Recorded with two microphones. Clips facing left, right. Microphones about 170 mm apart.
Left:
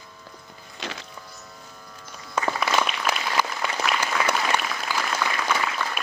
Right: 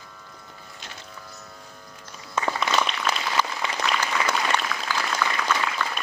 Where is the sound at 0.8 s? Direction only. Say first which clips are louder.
Left 10 dB; 90° left.